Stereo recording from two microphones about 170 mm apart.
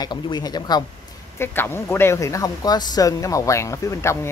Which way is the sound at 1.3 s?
15° left (ahead or behind).